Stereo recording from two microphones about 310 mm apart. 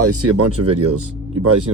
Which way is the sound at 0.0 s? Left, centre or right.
Right.